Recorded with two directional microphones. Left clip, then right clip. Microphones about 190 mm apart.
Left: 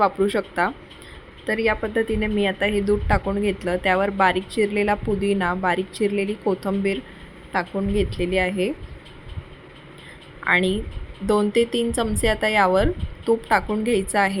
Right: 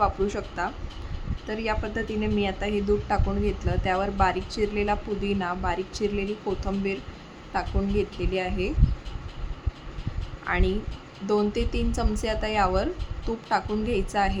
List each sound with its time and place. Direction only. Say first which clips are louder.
0.0 s a woman's voice: left 5 dB; 20° left (ahead or behind)
10.4 s a woman's voice: left 8 dB; 20° left (ahead or behind)